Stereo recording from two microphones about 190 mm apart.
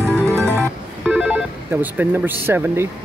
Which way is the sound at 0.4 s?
15° right (ahead or behind).